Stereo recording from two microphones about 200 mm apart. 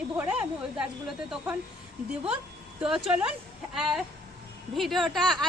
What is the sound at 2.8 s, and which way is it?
A woman's voice, 5° right (ahead or behind).